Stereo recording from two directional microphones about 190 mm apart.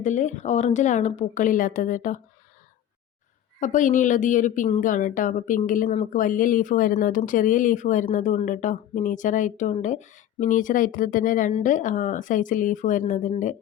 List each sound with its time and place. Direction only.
0.0 s a woman's voice: 40° left (ahead or behind)
3.6 s a woman's voice: 40° left (ahead or behind)